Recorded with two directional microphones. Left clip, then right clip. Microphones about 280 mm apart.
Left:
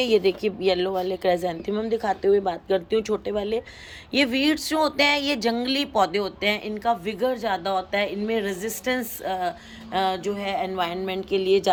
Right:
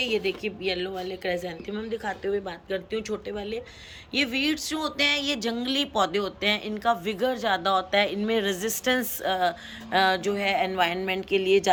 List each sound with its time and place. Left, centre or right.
0.0 s a woman's voice: centre